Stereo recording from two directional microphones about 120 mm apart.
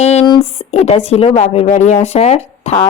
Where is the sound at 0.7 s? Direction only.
60° left (ahead or behind).